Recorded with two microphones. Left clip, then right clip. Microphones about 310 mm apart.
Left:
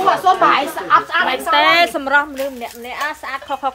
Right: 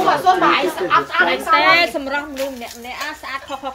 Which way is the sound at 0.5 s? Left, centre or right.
Left.